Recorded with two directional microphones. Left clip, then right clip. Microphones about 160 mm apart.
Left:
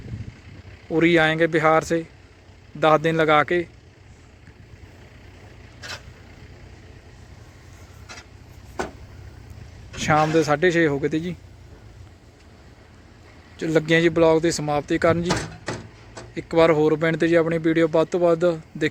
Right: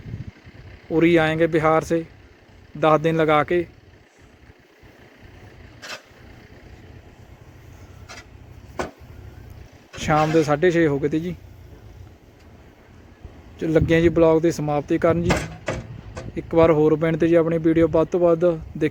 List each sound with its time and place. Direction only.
0.9 s speech: 10° right (ahead or behind)
10.0 s speech: 5° right (ahead or behind)
13.6 s speech: 5° right (ahead or behind)
15.6 s a sound: 60° right (ahead or behind)
16.3 s speech: 5° right (ahead or behind)